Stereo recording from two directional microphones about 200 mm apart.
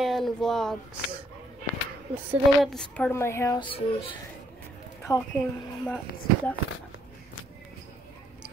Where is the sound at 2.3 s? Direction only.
Centre (ahead or behind); by 4.1 s 25° left (ahead or behind).